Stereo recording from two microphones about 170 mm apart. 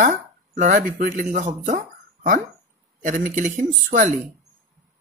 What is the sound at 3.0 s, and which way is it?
Speech, 50° right (ahead or behind).